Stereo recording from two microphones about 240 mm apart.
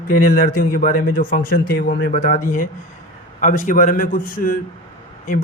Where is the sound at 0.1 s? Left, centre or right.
Left.